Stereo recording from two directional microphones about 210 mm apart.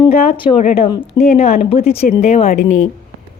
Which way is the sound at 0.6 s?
35° left (ahead or behind).